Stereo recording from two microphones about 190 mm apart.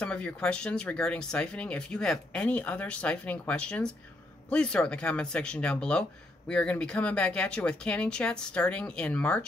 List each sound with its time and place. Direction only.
0.0 s speech: 5° left (ahead or behind)